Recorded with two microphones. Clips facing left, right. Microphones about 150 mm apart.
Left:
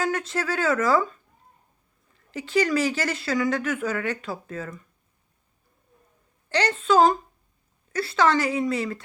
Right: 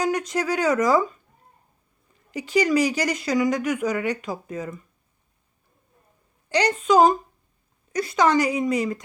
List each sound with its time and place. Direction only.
0.0 s speech: 15° right (ahead or behind)
2.3 s speech: 15° right (ahead or behind)
6.5 s speech: 15° right (ahead or behind)